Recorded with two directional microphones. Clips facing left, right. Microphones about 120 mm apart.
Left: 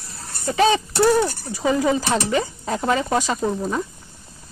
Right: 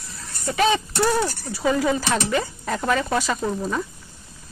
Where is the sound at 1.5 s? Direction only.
20° left (ahead or behind).